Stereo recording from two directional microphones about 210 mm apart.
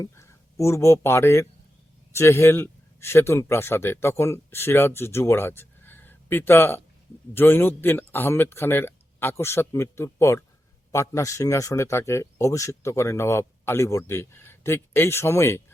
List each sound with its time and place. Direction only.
0.0 s a man's voice: 15° left (ahead or behind)